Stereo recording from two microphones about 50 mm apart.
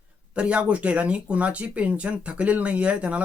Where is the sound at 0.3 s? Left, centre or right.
Right.